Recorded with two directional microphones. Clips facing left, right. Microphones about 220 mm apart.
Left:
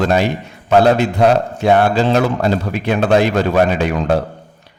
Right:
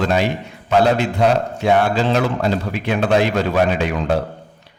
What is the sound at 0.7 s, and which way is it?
A man's voice, 40° left (ahead or behind).